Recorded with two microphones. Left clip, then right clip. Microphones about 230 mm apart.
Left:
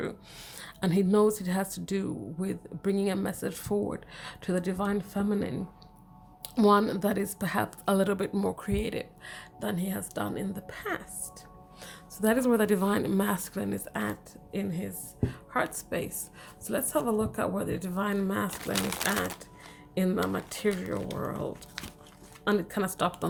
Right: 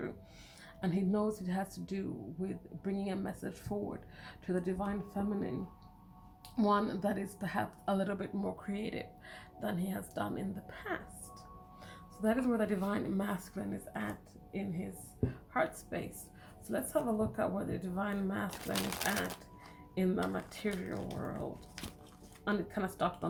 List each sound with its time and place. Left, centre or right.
0.6 s speech: left
6.6 s a woman's voice: left
18.7 s speech: centre
19.0 s a woman's voice: left
22.4 s a woman's voice: left